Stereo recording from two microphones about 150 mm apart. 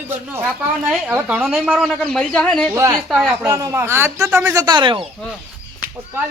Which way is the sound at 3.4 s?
20° right (ahead or behind).